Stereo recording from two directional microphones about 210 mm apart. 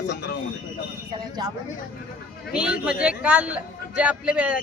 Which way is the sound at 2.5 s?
5° right (ahead or behind).